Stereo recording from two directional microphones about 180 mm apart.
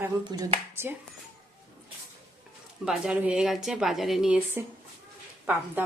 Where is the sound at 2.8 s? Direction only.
5° right (ahead or behind).